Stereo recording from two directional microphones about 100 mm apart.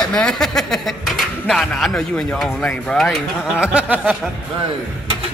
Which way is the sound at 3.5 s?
10° right (ahead or behind).